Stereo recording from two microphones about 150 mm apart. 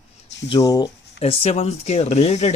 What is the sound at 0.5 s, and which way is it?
Speech, 25° left (ahead or behind).